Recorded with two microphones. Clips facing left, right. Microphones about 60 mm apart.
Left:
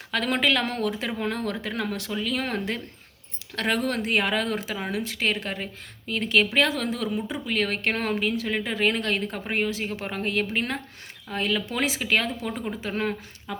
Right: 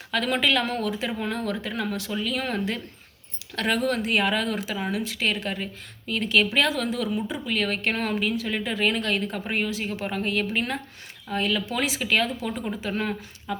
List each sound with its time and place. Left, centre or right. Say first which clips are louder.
0.1 s speech: even; left